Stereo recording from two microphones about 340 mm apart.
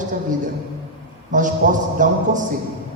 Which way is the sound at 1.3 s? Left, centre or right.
Right.